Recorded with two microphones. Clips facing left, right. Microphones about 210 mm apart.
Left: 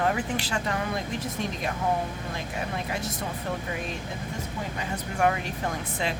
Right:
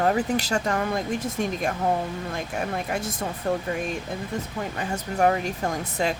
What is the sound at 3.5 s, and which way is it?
Speech, 50° right (ahead or behind).